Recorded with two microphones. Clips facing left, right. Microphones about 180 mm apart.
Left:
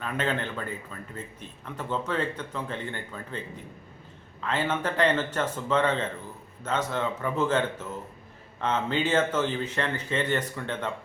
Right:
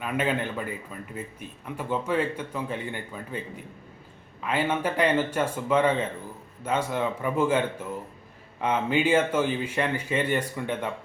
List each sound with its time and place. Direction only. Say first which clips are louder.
0.0 s a man's voice: right 2 dB; 10° right (ahead or behind)